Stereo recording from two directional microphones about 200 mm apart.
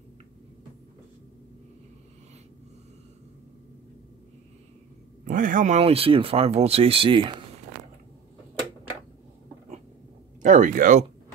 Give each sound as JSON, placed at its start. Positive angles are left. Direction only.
{"t": 5.2, "sound": "speech", "side_deg": -40}
{"t": 10.4, "sound": "speech", "side_deg": -40}